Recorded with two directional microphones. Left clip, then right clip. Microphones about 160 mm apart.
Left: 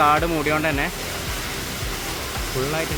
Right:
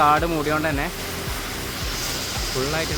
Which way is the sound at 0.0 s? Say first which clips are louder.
Even; centre (ahead or behind).